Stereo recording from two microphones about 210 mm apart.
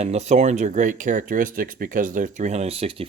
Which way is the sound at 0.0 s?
30° right (ahead or behind).